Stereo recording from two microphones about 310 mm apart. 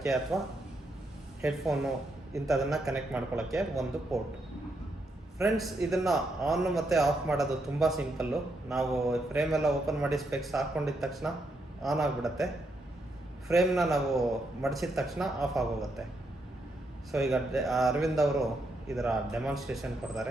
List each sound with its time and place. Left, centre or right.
0.0 s a man's voice: centre
5.4 s a man's voice: centre
13.5 s a man's voice: centre
17.1 s a man's voice: centre